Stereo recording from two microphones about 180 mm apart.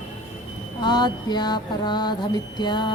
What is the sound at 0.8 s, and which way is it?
Mantra, 25° left (ahead or behind).